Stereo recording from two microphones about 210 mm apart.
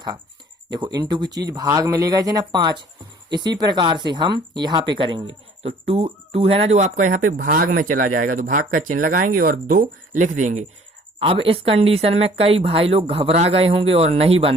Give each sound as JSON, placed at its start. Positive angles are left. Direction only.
{"t": 0.7, "sound": "speech", "side_deg": -20}
{"t": 11.2, "sound": "speech", "side_deg": -25}